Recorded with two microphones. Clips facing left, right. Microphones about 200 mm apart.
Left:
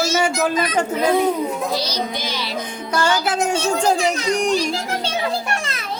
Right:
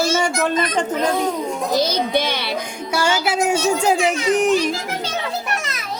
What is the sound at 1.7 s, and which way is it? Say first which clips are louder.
Speech: right 5 dB; 50° right (ahead or behind).